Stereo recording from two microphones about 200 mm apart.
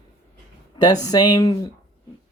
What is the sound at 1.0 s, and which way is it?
Speech, 20° left (ahead or behind).